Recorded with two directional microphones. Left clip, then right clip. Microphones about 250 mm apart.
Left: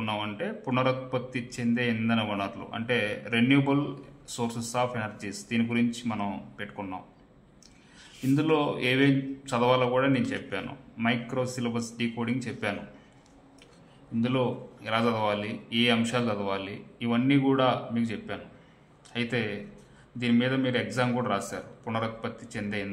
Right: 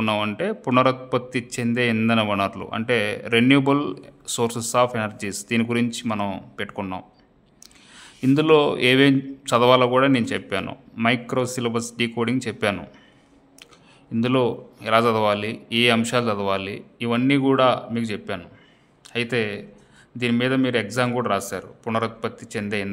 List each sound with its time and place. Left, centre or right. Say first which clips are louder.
0.0 s a man's voice: right 9 dB; right
8.0 s a man's voice: right 7 dB; right
14.2 s a man's voice: right 7 dB; right